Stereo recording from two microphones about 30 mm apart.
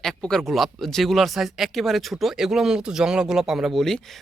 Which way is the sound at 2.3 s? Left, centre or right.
Centre.